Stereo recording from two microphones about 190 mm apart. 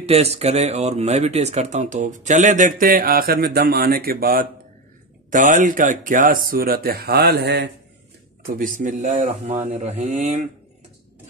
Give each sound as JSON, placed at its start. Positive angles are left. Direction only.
{"t": 0.0, "sound": "speech", "side_deg": -35}
{"t": 8.5, "sound": "speech", "side_deg": -45}